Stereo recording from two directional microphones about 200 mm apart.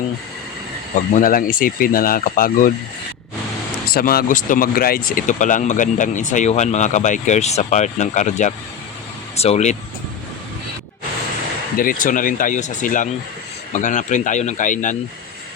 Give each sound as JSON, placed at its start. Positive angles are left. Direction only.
{"t": 1.1, "sound": "speech", "side_deg": 45}
{"t": 3.8, "sound": "speech", "side_deg": 50}
{"t": 11.8, "sound": "speech", "side_deg": 45}